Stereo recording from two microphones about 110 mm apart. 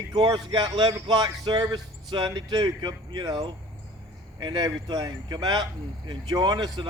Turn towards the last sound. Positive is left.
turn(degrees=-40)  # may be behind; listen again after turning